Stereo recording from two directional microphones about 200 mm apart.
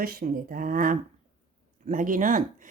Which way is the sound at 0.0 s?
45° right (ahead or behind).